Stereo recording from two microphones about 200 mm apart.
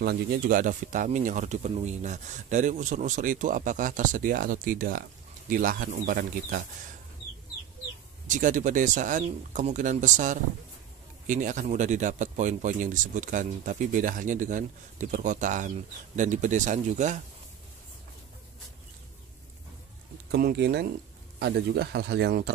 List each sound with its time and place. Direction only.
0.0 s speech: 50° right (ahead or behind)
8.3 s speech: 40° right (ahead or behind)
20.2 s speech: 55° right (ahead or behind)